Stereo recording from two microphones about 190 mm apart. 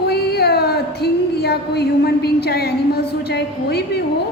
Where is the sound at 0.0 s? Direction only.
55° left (ahead or behind).